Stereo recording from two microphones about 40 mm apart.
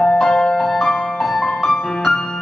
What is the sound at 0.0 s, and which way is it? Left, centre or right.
Music, centre.